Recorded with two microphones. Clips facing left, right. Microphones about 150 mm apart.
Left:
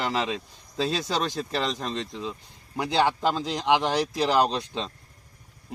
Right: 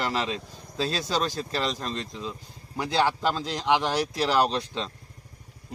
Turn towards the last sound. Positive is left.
turn(degrees=15)  # may be behind; listen again after turning